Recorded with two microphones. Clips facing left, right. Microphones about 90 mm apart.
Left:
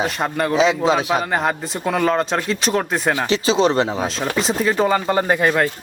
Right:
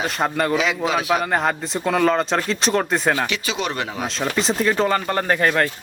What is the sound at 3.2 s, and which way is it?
Speech, 30° left (ahead or behind).